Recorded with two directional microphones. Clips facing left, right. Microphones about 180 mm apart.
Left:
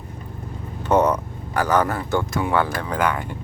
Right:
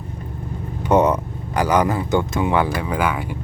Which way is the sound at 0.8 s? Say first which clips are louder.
Right 2 dB; 15° right (ahead or behind).